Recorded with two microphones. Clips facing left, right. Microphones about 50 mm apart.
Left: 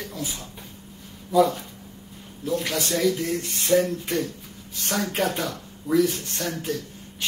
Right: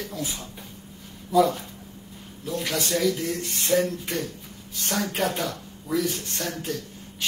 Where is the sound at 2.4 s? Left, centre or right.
Centre.